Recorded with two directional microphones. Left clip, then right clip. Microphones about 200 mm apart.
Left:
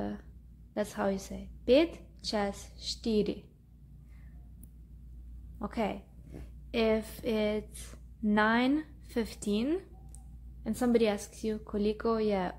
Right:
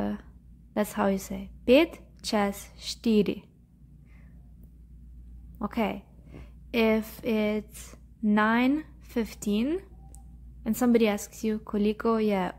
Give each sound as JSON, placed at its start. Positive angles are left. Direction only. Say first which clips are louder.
{"t": 0.0, "sound": "a sound", "louder": "right 5 dB", "side_deg": -20}
{"t": 0.7, "sound": "a woman's voice", "louder": "right 5 dB", "side_deg": -20}
{"t": 5.6, "sound": "a woman's voice", "louder": "right 4 dB", "side_deg": -20}